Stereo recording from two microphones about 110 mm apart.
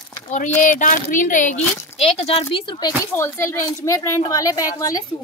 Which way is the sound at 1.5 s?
90° left.